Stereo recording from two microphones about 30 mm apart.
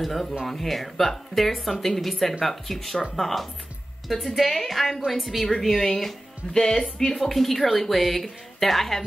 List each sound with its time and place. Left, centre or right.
0.0 s speech: centre
6.5 s speech: centre
7.1 s speech: centre